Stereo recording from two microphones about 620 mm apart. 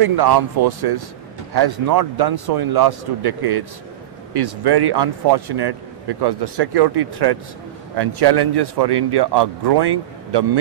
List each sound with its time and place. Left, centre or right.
0.0 s speech: right